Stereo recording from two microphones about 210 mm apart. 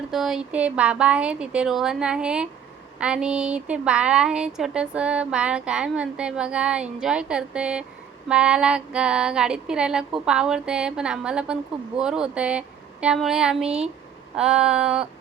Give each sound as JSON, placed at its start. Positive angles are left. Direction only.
{"t": 0.1, "sound": "speech", "side_deg": 0}